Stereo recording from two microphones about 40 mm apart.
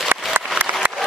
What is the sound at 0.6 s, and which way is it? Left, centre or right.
Applause, right.